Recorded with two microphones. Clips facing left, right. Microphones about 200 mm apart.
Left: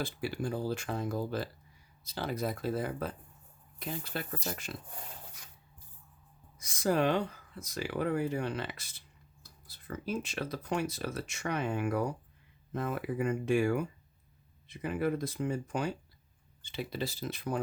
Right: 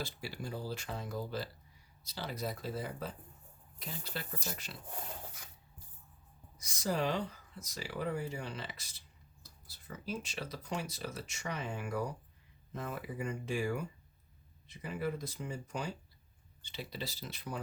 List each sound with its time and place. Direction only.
0.0 s speech: 50° left (ahead or behind)
6.6 s speech: 55° left (ahead or behind)